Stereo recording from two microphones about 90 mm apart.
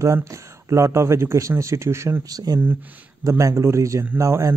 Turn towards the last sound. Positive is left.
turn(degrees=-35)  # may be behind; listen again after turning